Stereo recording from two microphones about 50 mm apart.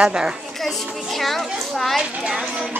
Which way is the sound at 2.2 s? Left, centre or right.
Centre.